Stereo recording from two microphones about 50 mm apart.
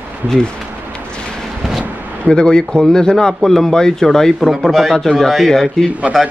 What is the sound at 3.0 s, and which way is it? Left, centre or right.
A man's voice, centre.